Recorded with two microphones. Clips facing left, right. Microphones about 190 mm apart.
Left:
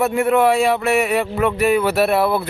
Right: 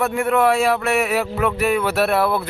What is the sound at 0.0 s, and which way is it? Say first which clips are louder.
A man's voice: left 2 dB; centre (ahead or behind).